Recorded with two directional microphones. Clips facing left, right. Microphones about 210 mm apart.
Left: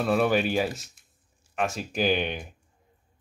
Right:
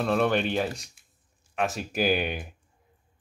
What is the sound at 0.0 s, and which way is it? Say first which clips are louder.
Speech: left 1 dB; 5° left (ahead or behind).